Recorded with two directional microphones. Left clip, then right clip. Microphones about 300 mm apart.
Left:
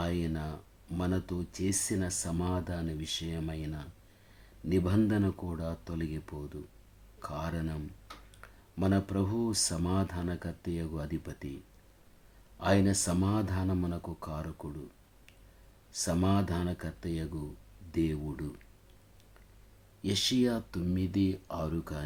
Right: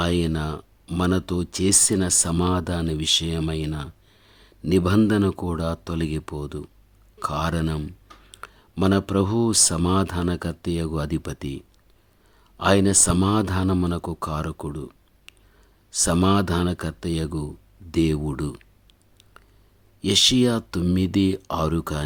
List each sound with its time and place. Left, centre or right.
0.0 s speech: right
12.5 s speech: right
15.9 s speech: right
20.0 s speech: right